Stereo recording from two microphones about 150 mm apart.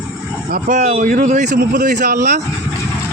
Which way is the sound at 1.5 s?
75° right (ahead or behind).